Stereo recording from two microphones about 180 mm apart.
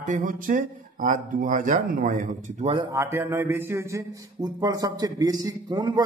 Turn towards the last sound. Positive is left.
turn(degrees=-25)  # may be behind; listen again after turning